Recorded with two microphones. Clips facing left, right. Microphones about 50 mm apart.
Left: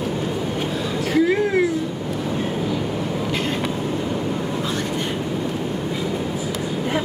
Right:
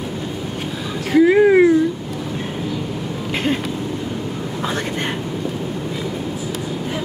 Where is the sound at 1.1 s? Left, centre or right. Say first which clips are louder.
Right 7 dB; right.